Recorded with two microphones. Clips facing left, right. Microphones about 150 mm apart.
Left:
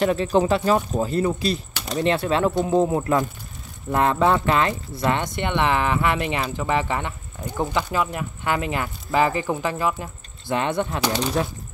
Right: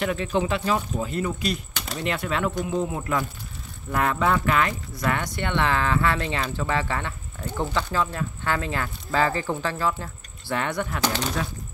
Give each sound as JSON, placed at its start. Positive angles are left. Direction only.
{"t": 0.0, "sound": "speech", "side_deg": 35}
{"t": 11.0, "sound": "speech", "side_deg": 10}